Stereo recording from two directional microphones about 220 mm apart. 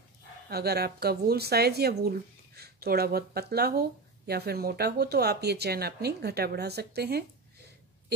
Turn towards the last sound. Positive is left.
turn(degrees=-45)  # may be behind; listen again after turning